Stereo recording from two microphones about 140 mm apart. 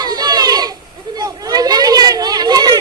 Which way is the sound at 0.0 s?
30° right (ahead or behind).